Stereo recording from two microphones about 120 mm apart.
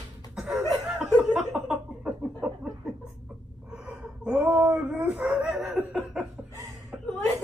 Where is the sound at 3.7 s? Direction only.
10° right (ahead or behind).